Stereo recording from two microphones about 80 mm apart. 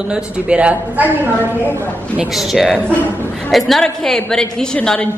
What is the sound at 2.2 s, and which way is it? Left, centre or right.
Speech, centre.